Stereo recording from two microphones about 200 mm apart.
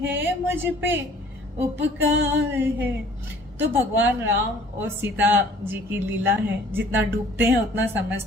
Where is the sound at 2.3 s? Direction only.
10° right (ahead or behind).